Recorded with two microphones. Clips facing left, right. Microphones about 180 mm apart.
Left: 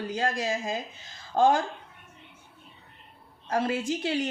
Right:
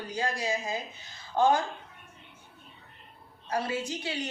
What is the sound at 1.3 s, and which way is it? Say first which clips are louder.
Speech: left 2 dB; 45° left (ahead or behind).